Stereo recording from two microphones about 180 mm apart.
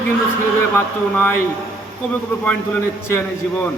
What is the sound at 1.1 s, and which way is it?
Speech, 10° left (ahead or behind).